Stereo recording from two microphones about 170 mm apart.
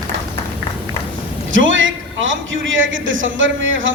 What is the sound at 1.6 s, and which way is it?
A man's voice, 90° right.